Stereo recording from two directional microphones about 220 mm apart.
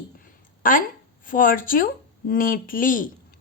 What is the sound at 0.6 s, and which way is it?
A woman's voice, 40° left (ahead or behind).